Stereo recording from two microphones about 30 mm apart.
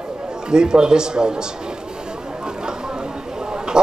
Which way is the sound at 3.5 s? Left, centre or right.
Right.